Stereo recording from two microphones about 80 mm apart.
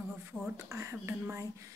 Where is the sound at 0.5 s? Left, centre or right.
Right.